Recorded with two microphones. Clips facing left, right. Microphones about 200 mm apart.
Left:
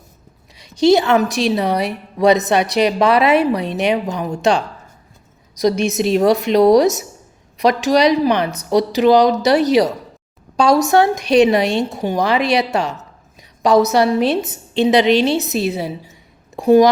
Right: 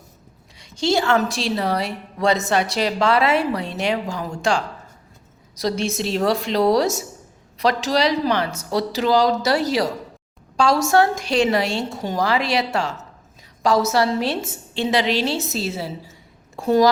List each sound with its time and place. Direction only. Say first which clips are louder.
0.6 s a woman's voice: left 8 dB; 20° left (ahead or behind)